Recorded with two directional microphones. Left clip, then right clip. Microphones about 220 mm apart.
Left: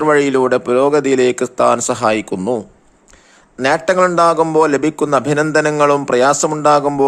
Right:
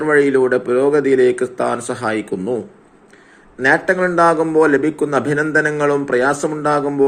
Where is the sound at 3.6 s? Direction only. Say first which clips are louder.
Left 2 dB; 40° left (ahead or behind).